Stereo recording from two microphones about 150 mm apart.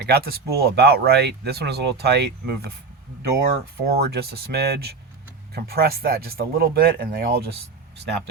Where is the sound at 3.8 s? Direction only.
90° right.